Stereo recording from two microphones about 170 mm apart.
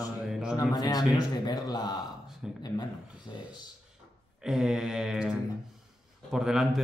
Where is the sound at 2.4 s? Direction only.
5° right (ahead or behind).